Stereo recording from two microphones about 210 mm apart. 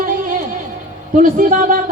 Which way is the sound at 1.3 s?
40° right (ahead or behind).